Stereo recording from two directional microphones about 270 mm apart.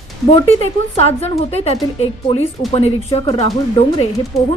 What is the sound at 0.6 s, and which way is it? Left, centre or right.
A woman's voice, left.